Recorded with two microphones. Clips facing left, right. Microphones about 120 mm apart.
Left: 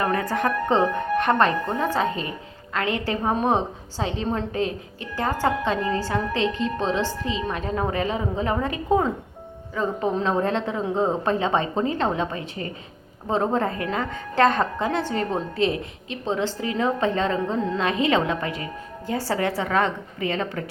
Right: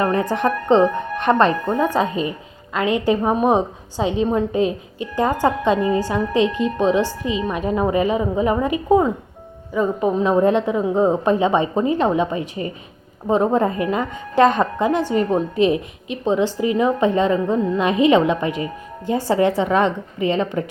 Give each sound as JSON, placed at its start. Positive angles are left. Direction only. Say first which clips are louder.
{"t": 0.0, "sound": "a woman's voice", "louder": "right 4 dB", "side_deg": -20}